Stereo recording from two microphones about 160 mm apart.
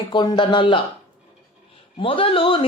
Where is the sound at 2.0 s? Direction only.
35° left (ahead or behind).